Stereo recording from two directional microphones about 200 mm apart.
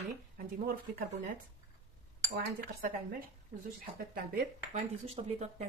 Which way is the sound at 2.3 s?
45° right (ahead or behind).